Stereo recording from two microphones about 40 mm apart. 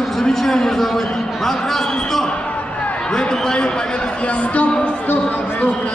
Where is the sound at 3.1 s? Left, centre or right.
Left.